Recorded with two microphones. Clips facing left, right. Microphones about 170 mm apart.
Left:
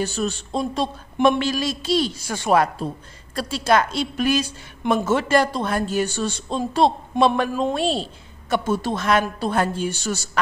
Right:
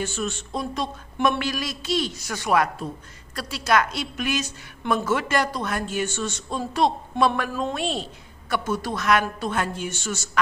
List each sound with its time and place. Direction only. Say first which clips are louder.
0.0 s a woman's voice: left 4 dB; 35° left (ahead or behind)
7.7 s a woman's voice: left 5 dB; 35° left (ahead or behind)